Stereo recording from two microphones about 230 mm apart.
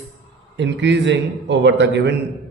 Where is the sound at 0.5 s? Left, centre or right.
Right.